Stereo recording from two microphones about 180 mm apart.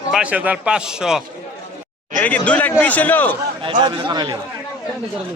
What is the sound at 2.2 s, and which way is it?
Speech, 10° left (ahead or behind).